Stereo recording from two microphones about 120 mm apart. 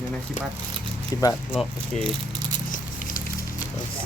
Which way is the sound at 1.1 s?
30° left (ahead or behind).